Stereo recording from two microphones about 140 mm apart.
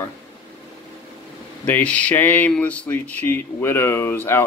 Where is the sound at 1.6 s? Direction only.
10° left (ahead or behind).